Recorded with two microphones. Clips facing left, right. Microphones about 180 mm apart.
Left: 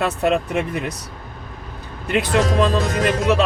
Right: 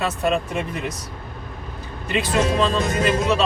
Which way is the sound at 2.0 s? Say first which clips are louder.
Left 3 dB; 65° left (ahead or behind).